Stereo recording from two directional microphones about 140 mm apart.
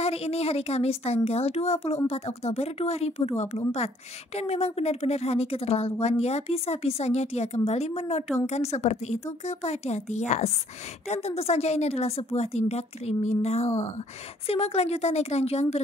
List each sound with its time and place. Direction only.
0.0 s a woman's voice: 45° left (ahead or behind)